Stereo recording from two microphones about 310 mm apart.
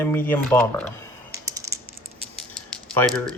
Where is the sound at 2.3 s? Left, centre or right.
Centre.